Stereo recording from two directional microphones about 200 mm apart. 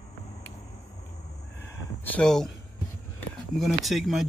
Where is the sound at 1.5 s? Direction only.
10° left (ahead or behind).